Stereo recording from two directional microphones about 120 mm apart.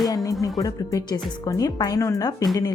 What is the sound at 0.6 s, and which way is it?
Speech, 30° left (ahead or behind).